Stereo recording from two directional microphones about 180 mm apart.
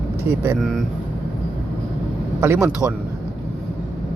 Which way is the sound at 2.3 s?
10° right (ahead or behind).